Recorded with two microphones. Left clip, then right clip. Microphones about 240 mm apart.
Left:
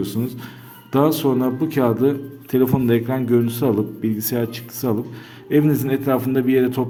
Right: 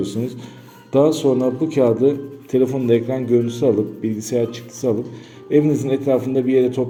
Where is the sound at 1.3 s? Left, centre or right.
Left.